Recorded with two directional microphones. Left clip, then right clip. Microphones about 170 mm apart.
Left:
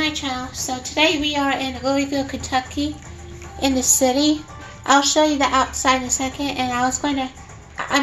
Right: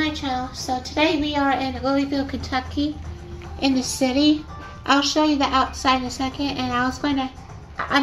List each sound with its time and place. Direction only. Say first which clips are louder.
0.0 s a woman's voice: left 1 dB; 15° right (ahead or behind)